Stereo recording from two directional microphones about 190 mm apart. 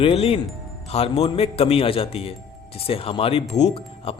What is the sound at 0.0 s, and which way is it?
Speech, 30° left (ahead or behind).